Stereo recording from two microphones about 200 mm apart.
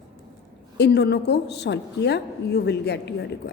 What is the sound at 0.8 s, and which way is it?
A woman's voice, 55° left (ahead or behind).